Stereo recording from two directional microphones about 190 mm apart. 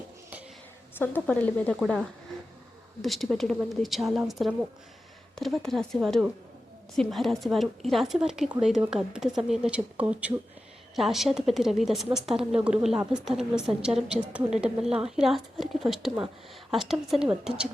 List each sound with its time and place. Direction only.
0.9 s a woman's voice: 10° left (ahead or behind)